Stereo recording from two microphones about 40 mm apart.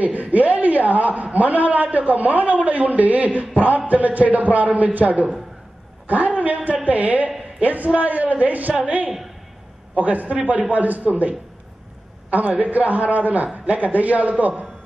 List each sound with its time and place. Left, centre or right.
0.0 s a man's voice: right